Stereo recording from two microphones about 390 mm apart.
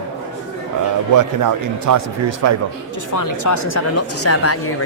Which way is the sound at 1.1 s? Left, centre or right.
Right.